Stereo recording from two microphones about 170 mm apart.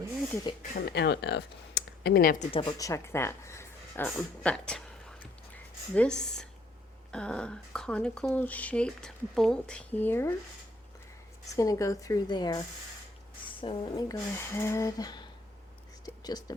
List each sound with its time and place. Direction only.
0.9 s speech: 80° left; by 2.5 s 55° left (ahead or behind)
2.5 s speech: 30° left (ahead or behind)
11.5 s speech: 20° left (ahead or behind)
14.1 s speech: 15° left (ahead or behind)